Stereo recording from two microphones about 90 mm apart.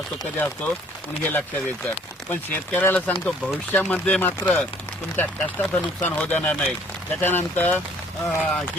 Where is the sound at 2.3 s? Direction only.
20° left (ahead or behind).